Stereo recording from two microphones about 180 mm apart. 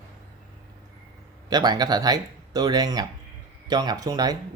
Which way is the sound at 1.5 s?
20° right (ahead or behind).